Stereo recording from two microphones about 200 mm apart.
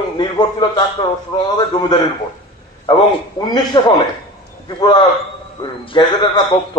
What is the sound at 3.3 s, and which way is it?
A man's voice, 20° left (ahead or behind).